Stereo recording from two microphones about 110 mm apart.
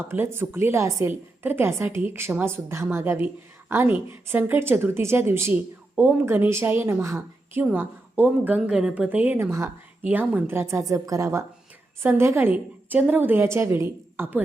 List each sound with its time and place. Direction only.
0.0 s a woman's voice: 20° right (ahead or behind)